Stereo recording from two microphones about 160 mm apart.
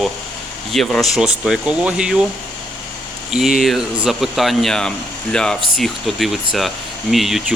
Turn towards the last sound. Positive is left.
turn(degrees=0)  # may be behind; listen again after turning